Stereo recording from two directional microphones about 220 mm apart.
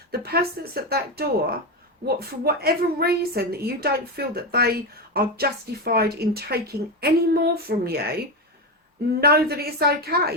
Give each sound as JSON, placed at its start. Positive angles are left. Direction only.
{"t": 0.1, "sound": "speech", "side_deg": -45}
{"t": 9.2, "sound": "speech", "side_deg": -45}